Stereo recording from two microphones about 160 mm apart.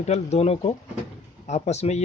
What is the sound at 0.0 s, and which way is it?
Speech, 45° left (ahead or behind).